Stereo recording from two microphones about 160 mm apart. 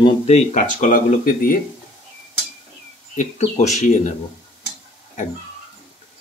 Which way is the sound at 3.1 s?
45° left (ahead or behind).